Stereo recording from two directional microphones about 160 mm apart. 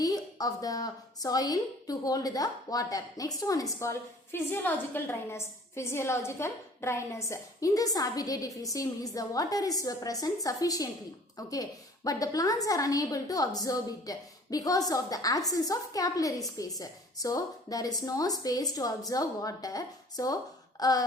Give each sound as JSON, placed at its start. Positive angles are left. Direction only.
{"t": 0.0, "sound": "a woman's voice", "side_deg": 25}